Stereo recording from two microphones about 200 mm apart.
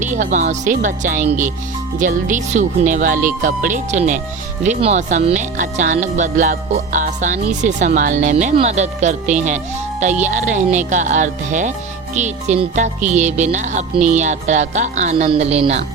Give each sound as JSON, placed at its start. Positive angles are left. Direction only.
{"t": 0.0, "sound": "speech", "side_deg": -40}